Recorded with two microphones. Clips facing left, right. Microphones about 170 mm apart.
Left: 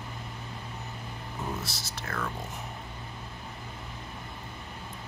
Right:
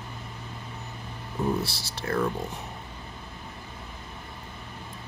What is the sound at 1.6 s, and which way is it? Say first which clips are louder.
Speech: right 5 dB; 30° right (ahead or behind).